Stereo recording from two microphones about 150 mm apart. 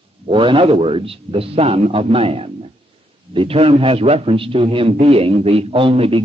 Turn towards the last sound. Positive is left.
turn(degrees=-40)  # may be behind; listen again after turning